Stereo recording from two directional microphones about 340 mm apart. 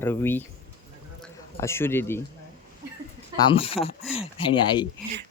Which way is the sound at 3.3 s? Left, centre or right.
Centre.